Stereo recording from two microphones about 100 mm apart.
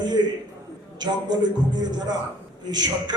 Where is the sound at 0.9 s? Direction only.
45° right (ahead or behind).